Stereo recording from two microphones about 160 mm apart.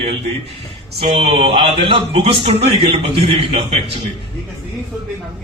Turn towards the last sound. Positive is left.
turn(degrees=-35)  # may be behind; listen again after turning